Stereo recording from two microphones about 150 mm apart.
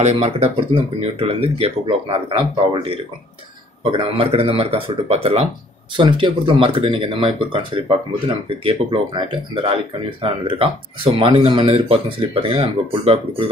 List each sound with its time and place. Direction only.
0.0 s speech: 45° right (ahead or behind)